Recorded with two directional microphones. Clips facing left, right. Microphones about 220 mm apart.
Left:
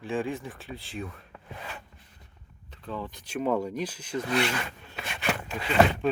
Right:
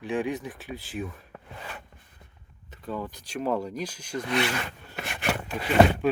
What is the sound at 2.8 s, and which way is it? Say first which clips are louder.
Speech: right 2 dB; 10° right (ahead or behind).